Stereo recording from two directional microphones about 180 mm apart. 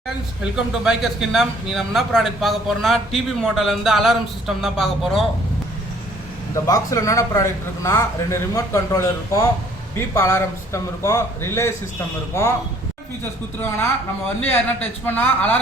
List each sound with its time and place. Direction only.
0.5 s a man's voice: centre (ahead or behind)
6.7 s a man's voice: 15° left (ahead or behind)
13.6 s a man's voice: 10° left (ahead or behind)